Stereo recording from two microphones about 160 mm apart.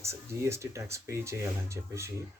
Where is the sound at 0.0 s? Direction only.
15° right (ahead or behind).